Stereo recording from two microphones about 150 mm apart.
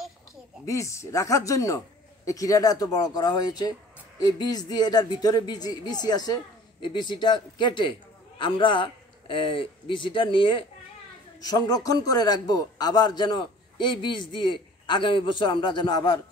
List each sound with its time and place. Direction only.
0.7 s a man's voice: 20° left (ahead or behind)